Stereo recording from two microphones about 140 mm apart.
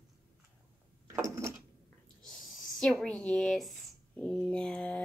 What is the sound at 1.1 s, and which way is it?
Door, 20° right (ahead or behind).